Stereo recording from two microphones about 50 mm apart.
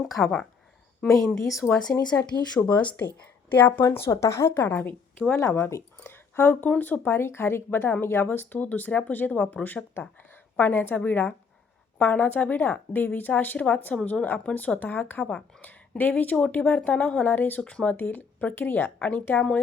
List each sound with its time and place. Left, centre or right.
0.0 s speech: centre
2.6 s speech: left
3.5 s speech: left
4.1 s speech: left
4.5 s speech: left
6.0 s speech: left
7.2 s speech: left
15.2 s speech: centre
15.6 s speech: left
17.2 s speech: left
17.6 s speech: left
17.9 s speech: left